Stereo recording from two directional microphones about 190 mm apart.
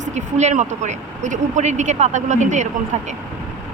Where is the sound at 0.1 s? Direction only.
35° right (ahead or behind).